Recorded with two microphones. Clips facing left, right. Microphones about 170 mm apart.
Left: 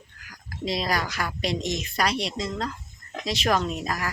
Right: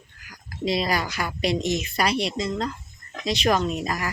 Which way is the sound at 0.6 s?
Centre (ahead or behind).